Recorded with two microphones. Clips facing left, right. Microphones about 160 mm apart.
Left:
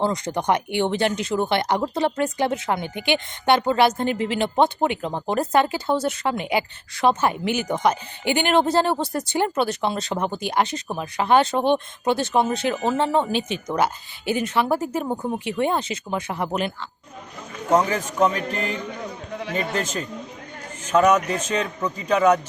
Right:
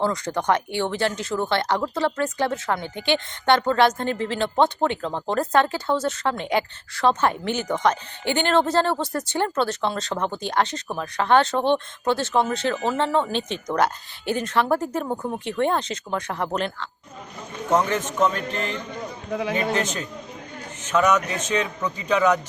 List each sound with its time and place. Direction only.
0.0 s speech: 15° left (ahead or behind)
19.3 s a man's voice: 60° right (ahead or behind)
19.5 s a man's voice: centre (ahead or behind)
21.4 s speech: 10° left (ahead or behind)